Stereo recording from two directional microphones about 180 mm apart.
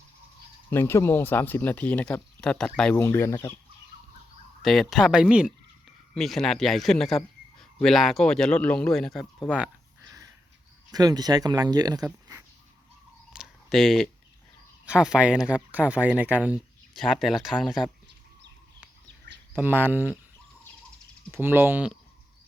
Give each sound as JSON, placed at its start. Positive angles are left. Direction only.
{"t": 0.7, "sound": "speech", "side_deg": 15}
{"t": 4.6, "sound": "speech", "side_deg": 0}
{"t": 9.5, "sound": "a sound", "side_deg": -5}
{"t": 10.9, "sound": "speech", "side_deg": -20}
{"t": 13.3, "sound": "a sound", "side_deg": 0}
{"t": 14.8, "sound": "speech", "side_deg": -5}
{"t": 19.5, "sound": "speech", "side_deg": -10}
{"t": 21.3, "sound": "speech", "side_deg": -10}